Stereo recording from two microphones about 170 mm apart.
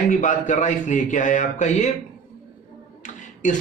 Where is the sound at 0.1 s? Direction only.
50° left (ahead or behind).